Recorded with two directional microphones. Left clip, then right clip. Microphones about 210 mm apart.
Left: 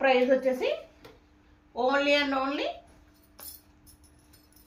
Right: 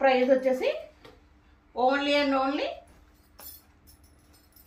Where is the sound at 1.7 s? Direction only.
15° left (ahead or behind).